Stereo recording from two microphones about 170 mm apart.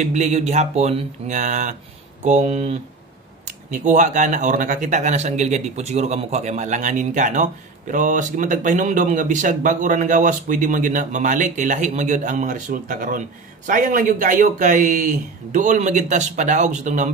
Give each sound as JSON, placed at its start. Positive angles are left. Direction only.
{"t": 0.0, "sound": "a man's voice", "side_deg": -40}
{"t": 3.7, "sound": "a man's voice", "side_deg": -45}